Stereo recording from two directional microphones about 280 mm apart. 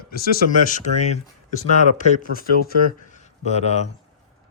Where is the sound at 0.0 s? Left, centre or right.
Left.